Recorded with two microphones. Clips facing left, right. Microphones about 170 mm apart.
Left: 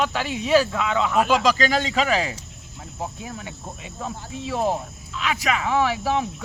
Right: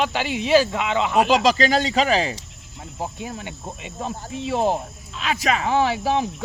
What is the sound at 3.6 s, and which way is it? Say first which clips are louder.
Speech: right 3 dB; 25° right (ahead or behind).